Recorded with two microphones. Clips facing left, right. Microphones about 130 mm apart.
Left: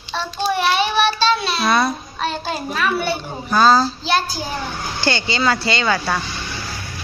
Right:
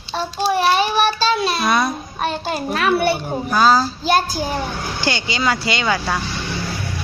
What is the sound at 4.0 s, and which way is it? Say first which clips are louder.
Child singing: right 3 dB; 50° right (ahead or behind).